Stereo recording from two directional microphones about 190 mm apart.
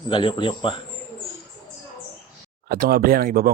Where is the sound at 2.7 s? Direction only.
50° right (ahead or behind).